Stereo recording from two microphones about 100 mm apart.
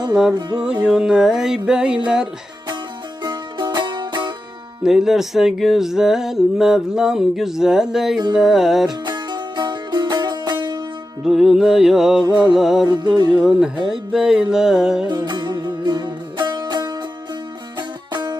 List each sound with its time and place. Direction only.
0.1 s music: 5° right (ahead or behind)
3.2 s music: 45° right (ahead or behind)
4.8 s music: 5° right (ahead or behind)
9.0 s music: 45° right (ahead or behind)
11.2 s music: 5° right (ahead or behind)
12.9 s music: 50° right (ahead or behind)
13.4 s music: 5° right (ahead or behind)
15.0 s music: 50° right (ahead or behind)